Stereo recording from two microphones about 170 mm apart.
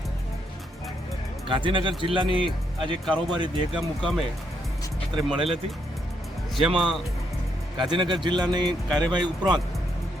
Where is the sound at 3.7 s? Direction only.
Centre (ahead or behind).